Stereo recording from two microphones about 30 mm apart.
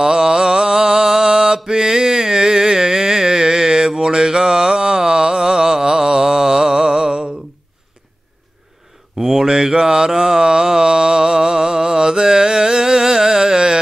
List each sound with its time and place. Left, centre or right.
0.0 s mantra: right
9.2 s a sound: centre
9.5 s mantra: right